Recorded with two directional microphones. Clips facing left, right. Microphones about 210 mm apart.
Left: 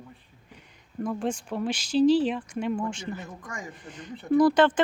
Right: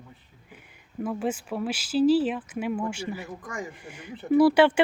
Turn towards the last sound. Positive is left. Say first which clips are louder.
# right 1 dB
turn(degrees=-10)  # may be behind; listen again after turning